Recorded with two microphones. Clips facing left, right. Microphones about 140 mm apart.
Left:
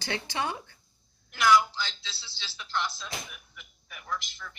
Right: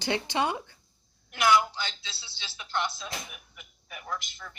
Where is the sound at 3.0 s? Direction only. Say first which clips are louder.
Right 1 dB; 5° right (ahead or behind).